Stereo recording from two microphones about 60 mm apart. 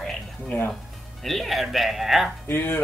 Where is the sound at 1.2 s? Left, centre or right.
Centre.